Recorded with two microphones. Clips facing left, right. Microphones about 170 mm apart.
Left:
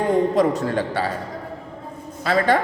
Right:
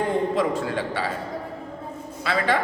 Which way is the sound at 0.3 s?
40° left (ahead or behind).